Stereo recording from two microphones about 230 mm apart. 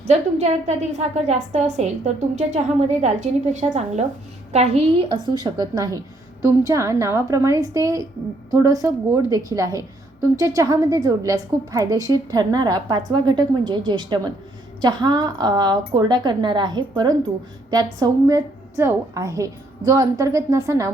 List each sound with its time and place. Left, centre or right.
0.1 s a woman's voice: right; by 20.9 s centre